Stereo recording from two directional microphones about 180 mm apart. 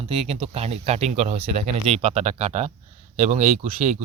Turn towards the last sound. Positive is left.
turn(degrees=-40)  # may be behind; listen again after turning